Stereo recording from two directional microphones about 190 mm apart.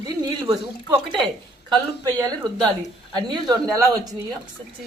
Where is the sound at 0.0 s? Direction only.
20° right (ahead or behind).